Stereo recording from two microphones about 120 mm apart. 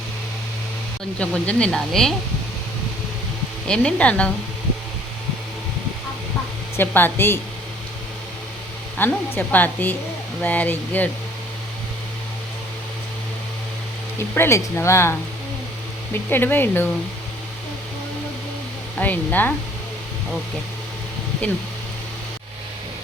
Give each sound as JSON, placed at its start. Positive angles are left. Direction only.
{"t": 1.2, "sound": "speech", "side_deg": 10}
{"t": 3.7, "sound": "speech", "side_deg": 10}
{"t": 6.7, "sound": "speech", "side_deg": 20}
{"t": 9.0, "sound": "speech", "side_deg": 15}
{"t": 14.3, "sound": "speech", "side_deg": 20}
{"t": 18.9, "sound": "speech", "side_deg": 15}